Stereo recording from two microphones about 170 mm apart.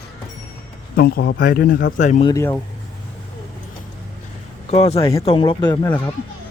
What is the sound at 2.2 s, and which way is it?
Speech, 15° left (ahead or behind).